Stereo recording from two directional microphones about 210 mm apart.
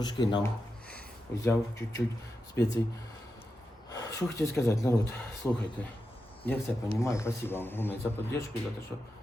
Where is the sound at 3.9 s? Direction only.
15° left (ahead or behind).